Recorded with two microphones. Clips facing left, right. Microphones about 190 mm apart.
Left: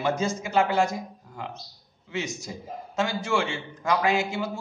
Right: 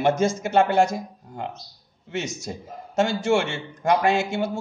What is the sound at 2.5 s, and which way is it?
Speech, 50° right (ahead or behind).